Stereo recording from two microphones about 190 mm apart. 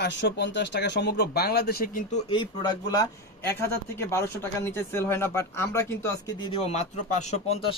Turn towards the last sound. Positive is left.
turn(degrees=35)  # may be behind; listen again after turning